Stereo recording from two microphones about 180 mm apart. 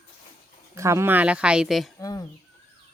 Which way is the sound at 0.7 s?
15° right (ahead or behind).